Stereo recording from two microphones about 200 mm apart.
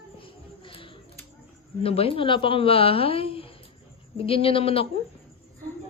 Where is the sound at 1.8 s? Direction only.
30° left (ahead or behind).